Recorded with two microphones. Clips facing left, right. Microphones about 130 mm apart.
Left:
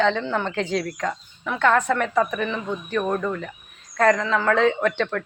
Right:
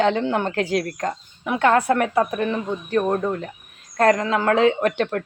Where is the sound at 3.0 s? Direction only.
25° right (ahead or behind).